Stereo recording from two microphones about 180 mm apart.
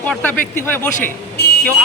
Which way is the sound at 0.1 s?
10° left (ahead or behind).